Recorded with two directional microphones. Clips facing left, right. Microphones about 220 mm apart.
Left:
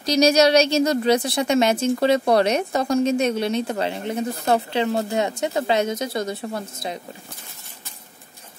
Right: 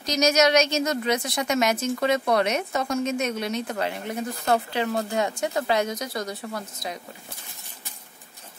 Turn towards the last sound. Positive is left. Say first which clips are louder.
# left 4 dB
turn(degrees=25)  # may be behind; listen again after turning